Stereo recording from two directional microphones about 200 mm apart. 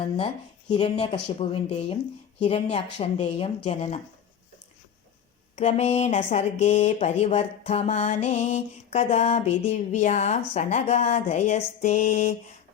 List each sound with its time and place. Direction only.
0.7 s speech: 30° left (ahead or behind)
5.5 s speech: 35° left (ahead or behind)